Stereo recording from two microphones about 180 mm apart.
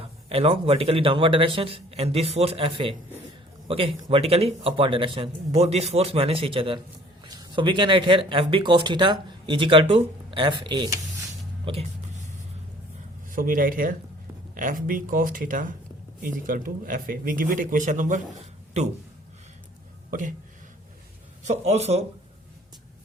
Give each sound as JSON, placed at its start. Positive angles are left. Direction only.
{"t": 0.3, "sound": "speech", "side_deg": -30}
{"t": 11.6, "sound": "a sound", "side_deg": -35}
{"t": 13.3, "sound": "speech", "side_deg": -50}
{"t": 20.1, "sound": "speech", "side_deg": -45}
{"t": 21.4, "sound": "speech", "side_deg": -40}